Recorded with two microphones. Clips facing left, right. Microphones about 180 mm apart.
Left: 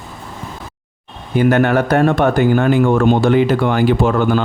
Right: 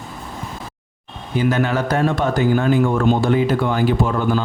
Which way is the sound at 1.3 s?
60° left (ahead or behind).